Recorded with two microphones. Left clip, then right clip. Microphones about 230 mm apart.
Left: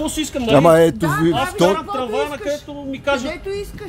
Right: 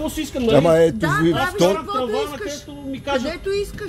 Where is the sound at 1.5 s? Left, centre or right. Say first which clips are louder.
Left 2 dB; left.